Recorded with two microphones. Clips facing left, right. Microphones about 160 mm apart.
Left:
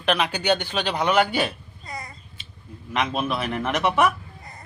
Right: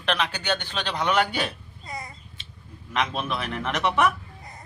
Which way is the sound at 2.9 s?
5° left (ahead or behind).